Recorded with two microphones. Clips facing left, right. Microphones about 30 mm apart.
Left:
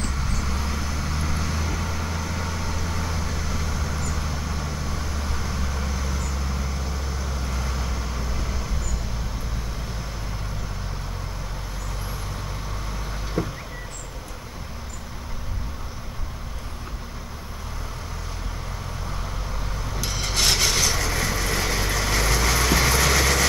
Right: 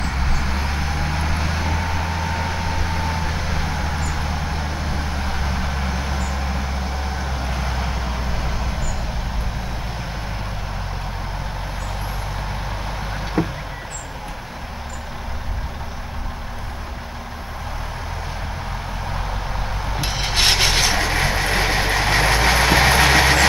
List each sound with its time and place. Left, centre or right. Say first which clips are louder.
0.0 s vehicle: right 5 dB; right
13.4 s a sound: right 5 dB; right
19.8 s vehicle: right 4 dB; right